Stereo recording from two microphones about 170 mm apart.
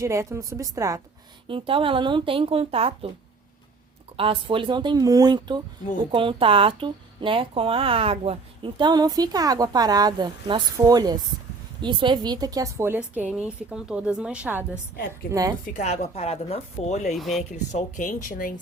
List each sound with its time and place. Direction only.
0.0 s a woman's voice: 15° right (ahead or behind)
1.5 s speech: 30° right (ahead or behind)
4.2 s a woman's voice: 30° right (ahead or behind); by 14.6 s 10° right (ahead or behind)
15.3 s speech: 20° right (ahead or behind)
15.6 s speech: 45° left (ahead or behind)
17.2 s speech: centre (ahead or behind)
17.7 s speech: 45° left (ahead or behind)